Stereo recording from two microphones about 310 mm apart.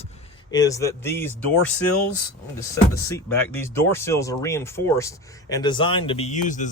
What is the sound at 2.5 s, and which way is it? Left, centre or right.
Speech, centre.